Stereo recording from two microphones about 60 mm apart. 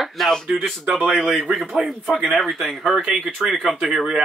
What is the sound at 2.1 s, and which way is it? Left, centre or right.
Speech, right.